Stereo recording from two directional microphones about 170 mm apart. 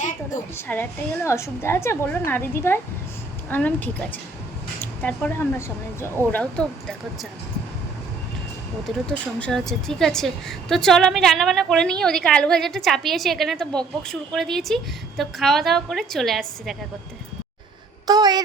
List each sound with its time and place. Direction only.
0.5 s speech: 15° left (ahead or behind)
9.4 s a woman's voice: 5° left (ahead or behind)
18.0 s speech: 25° right (ahead or behind)